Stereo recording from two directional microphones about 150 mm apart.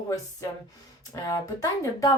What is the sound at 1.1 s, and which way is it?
Speech, 20° left (ahead or behind).